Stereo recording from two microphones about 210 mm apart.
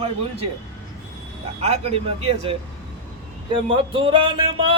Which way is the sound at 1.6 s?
30° right (ahead or behind).